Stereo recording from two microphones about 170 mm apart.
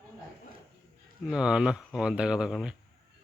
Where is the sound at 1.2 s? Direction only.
5° right (ahead or behind).